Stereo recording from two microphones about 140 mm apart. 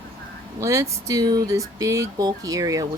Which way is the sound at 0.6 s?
20° right (ahead or behind).